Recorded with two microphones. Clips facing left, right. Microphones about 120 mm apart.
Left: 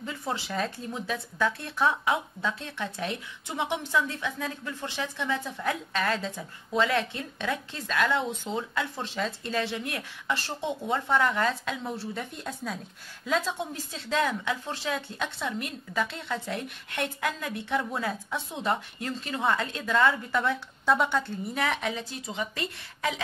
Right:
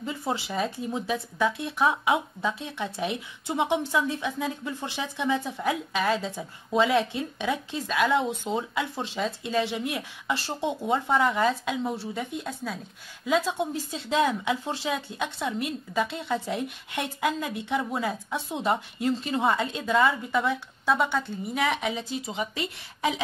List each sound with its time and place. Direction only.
0.0 s a woman's voice: 20° right (ahead or behind)
10.9 s a woman's voice: 20° right (ahead or behind)
13.6 s a woman's voice: 20° right (ahead or behind)
20.0 s a woman's voice: 5° right (ahead or behind)
22.3 s speech: 15° right (ahead or behind)